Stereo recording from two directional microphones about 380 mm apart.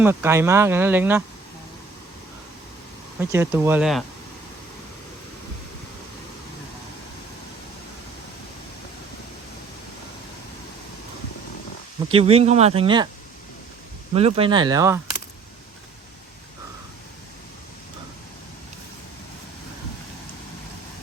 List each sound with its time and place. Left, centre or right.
0.0 s speech: centre
3.2 s speech: centre
12.1 s speech: centre
14.1 s speech: centre